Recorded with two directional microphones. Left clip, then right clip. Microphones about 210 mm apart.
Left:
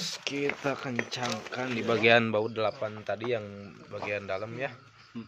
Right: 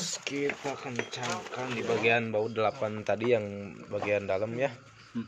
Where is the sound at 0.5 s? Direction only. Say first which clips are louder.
Left 3 dB; 40° left (ahead or behind).